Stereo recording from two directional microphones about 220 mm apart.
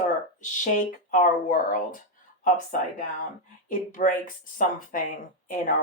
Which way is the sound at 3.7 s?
35° left (ahead or behind).